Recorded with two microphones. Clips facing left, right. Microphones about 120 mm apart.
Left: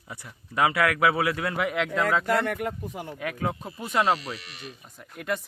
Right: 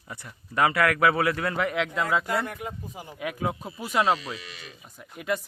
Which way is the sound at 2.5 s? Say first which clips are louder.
Left 6 dB; 70° left (ahead or behind).